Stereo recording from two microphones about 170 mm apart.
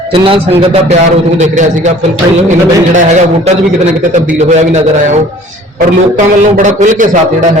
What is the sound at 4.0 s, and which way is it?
A man's voice, 50° right (ahead or behind).